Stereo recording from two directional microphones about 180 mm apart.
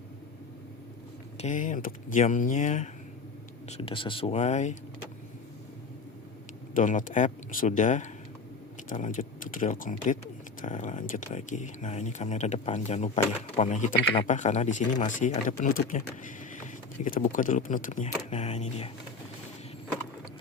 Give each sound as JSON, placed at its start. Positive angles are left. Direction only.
{"t": 1.4, "sound": "speech", "side_deg": 45}
{"t": 3.7, "sound": "speech", "side_deg": 30}
{"t": 6.7, "sound": "speech", "side_deg": 45}
{"t": 18.3, "sound": "a sound", "side_deg": 35}